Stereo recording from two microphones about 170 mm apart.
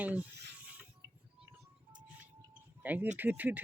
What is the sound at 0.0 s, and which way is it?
Speech, 10° right (ahead or behind).